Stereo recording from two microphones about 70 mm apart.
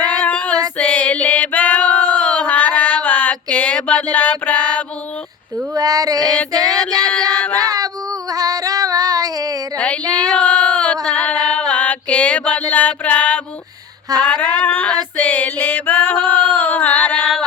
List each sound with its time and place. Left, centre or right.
0.3 s female singing: centre
2.1 s a sound: left
5.7 s female singing: right
7.0 s music: centre
7.6 s child singing: right
8.3 s female singing: right
9.7 s child singing: centre
10.2 s female singing: centre
11.0 s mantra: centre
12.7 s music: left
14.3 s a sound: left
15.2 s music: left